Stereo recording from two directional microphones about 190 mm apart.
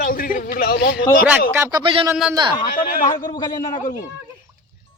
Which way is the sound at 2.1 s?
5° right (ahead or behind).